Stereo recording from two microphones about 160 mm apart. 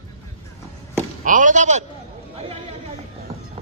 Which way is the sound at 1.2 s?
55° right (ahead or behind).